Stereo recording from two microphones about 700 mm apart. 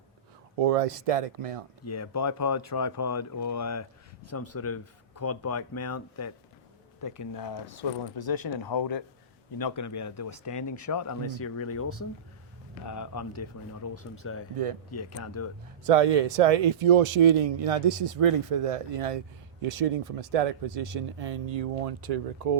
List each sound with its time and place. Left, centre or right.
0.6 s speech: right
1.8 s speech: left
15.8 s speech: right